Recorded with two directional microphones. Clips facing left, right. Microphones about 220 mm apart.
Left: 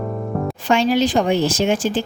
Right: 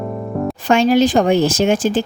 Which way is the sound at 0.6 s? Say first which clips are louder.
Right 4 dB; 50° right (ahead or behind).